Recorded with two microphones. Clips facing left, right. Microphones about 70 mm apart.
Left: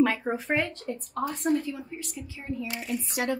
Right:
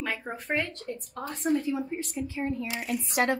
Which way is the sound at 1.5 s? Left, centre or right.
Centre.